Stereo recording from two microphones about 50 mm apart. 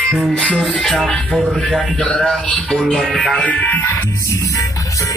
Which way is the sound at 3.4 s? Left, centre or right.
Left.